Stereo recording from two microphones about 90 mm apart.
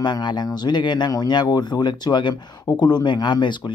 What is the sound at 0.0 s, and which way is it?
Speech, 55° left (ahead or behind).